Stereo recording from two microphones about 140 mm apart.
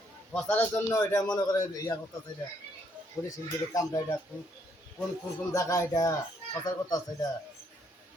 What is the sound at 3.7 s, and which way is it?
Speech, 20° left (ahead or behind).